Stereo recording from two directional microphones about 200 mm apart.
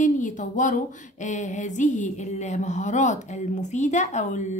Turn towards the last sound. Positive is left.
turn(degrees=35)  # may be behind; listen again after turning